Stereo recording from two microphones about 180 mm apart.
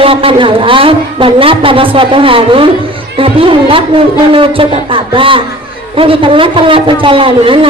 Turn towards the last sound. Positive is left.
turn(degrees=-30)  # may be behind; listen again after turning